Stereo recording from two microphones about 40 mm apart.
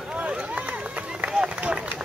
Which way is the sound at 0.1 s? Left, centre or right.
Right.